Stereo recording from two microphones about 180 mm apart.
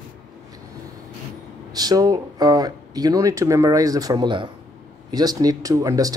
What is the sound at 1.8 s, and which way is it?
Speech, 20° right (ahead or behind).